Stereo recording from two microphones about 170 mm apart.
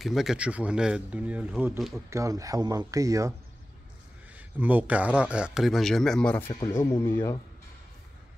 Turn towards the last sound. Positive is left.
turn(degrees=15)  # may be behind; listen again after turning